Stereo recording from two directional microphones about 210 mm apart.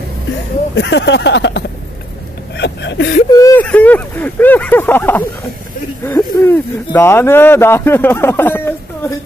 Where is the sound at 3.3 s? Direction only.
15° left (ahead or behind).